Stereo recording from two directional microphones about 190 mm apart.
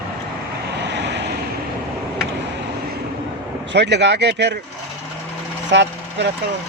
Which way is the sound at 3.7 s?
65° right (ahead or behind).